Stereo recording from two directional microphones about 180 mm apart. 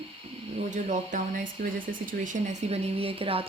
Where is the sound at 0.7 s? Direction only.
45° right (ahead or behind).